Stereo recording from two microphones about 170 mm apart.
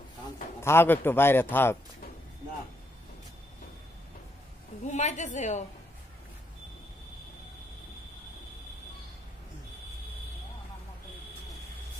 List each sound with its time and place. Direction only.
0.6 s a man's voice: 15° left (ahead or behind)
4.8 s a woman's voice: 45° left (ahead or behind)